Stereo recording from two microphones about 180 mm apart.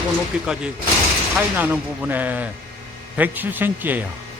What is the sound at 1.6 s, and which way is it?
Speech, 10° right (ahead or behind).